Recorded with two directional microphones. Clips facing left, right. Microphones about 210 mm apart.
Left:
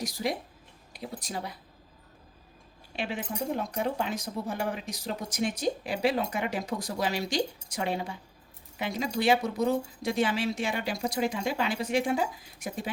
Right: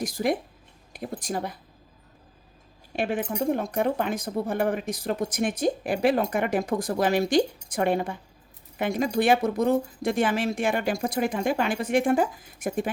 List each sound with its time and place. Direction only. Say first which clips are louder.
0.0 s speech: right 6 dB; 50° right (ahead or behind)
2.9 s speech: right 7 dB; 50° right (ahead or behind)